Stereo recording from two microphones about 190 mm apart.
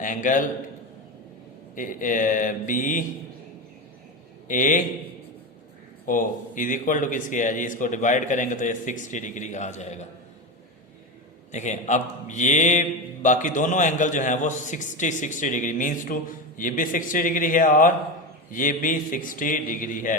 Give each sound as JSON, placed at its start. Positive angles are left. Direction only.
{"t": 0.0, "sound": "a man's voice", "side_deg": 45}
{"t": 1.7, "sound": "a man's voice", "side_deg": 45}
{"t": 4.4, "sound": "a man's voice", "side_deg": 45}
{"t": 6.1, "sound": "a man's voice", "side_deg": 45}
{"t": 11.5, "sound": "a man's voice", "side_deg": 40}